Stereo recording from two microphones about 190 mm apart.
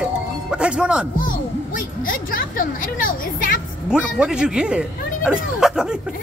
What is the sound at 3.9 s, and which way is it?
Speech, 5° right (ahead or behind).